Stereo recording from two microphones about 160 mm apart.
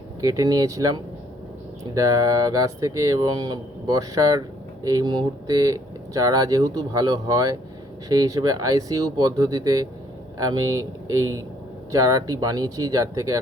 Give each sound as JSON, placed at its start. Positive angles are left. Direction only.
{"t": 0.2, "sound": "speech", "side_deg": -25}